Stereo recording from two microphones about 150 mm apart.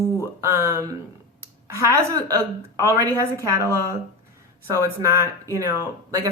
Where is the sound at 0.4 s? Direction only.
20° right (ahead or behind).